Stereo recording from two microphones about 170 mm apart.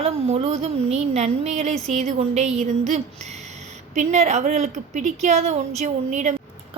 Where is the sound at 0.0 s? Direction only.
40° right (ahead or behind).